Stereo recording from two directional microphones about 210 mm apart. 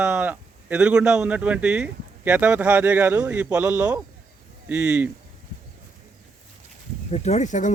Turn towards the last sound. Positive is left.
turn(degrees=35)  # may be behind; listen again after turning